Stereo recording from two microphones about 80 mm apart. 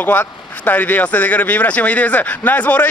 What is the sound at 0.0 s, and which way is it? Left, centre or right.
Speech, left.